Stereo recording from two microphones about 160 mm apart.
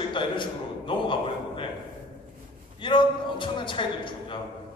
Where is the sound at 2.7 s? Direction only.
30° left (ahead or behind).